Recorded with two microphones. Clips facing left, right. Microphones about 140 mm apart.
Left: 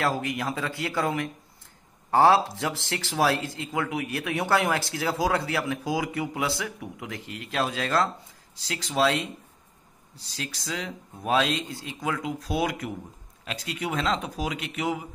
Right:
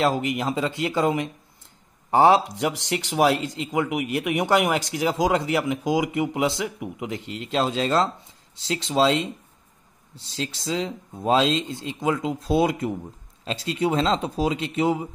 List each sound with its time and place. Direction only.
0.0 s speech: 20° right (ahead or behind)